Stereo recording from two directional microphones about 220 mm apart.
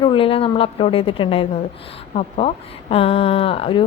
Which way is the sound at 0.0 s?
25° left (ahead or behind).